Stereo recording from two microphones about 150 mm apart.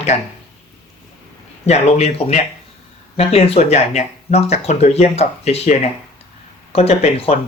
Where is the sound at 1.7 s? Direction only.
45° left (ahead or behind).